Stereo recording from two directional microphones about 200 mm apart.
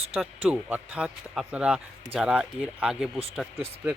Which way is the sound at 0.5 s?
5° right (ahead or behind).